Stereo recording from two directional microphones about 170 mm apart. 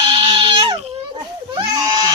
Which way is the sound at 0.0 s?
30° right (ahead or behind).